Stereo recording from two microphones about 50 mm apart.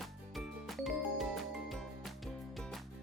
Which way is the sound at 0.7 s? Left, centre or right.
Centre.